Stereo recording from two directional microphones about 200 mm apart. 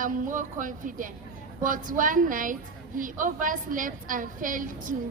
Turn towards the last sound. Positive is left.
turn(degrees=-40)  # may be behind; listen again after turning